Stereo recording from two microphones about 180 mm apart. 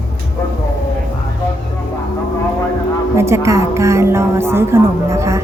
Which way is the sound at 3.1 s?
15° right (ahead or behind).